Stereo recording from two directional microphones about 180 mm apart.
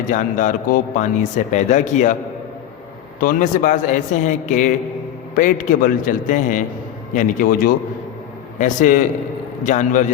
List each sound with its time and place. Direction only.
0.1 s a man's voice: 45° left (ahead or behind)
3.2 s a man's voice: 50° left (ahead or behind)